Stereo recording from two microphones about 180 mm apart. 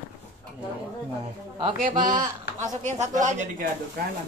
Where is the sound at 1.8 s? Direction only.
45° right (ahead or behind).